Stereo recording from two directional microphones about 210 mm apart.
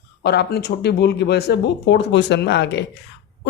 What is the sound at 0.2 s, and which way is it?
Speech, 50° left (ahead or behind).